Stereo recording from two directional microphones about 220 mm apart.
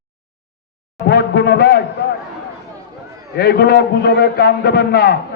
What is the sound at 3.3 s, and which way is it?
A man's voice, 45° left (ahead or behind).